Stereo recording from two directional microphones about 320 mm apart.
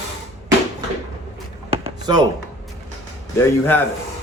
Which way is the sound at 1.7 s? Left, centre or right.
Centre.